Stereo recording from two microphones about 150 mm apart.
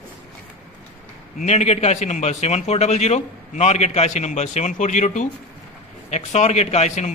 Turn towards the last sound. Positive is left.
turn(degrees=50)  # may be behind; listen again after turning